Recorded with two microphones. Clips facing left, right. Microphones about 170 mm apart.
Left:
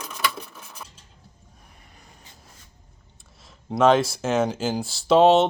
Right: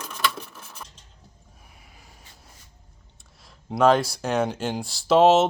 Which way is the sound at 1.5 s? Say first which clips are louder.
Even; 5° right (ahead or behind).